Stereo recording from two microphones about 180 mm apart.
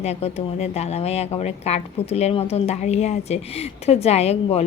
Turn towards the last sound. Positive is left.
turn(degrees=35)  # may be behind; listen again after turning